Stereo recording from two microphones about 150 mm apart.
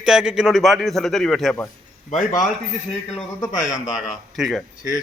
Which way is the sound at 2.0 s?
60° left (ahead or behind).